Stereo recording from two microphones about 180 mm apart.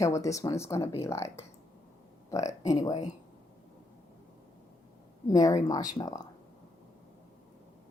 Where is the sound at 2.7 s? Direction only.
20° left (ahead or behind).